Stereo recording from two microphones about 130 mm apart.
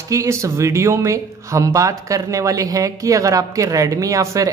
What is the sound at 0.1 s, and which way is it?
Speech, 25° right (ahead or behind).